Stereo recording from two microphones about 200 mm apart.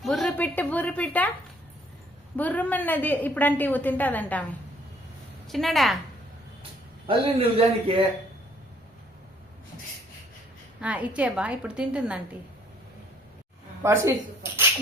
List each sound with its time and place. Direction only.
0.0 s a woman's voice: centre (ahead or behind)
2.3 s a woman's voice: 5° left (ahead or behind)
5.5 s a woman's voice: centre (ahead or behind)
7.1 s speech: 30° right (ahead or behind)
10.8 s a woman's voice: 5° right (ahead or behind)
13.8 s a woman's voice: 15° right (ahead or behind)